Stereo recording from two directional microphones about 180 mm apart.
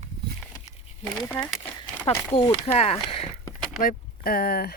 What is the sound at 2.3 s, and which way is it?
Speech, 35° left (ahead or behind).